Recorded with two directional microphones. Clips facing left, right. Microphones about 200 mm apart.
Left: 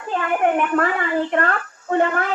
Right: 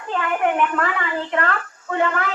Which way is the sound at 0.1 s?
40° left (ahead or behind).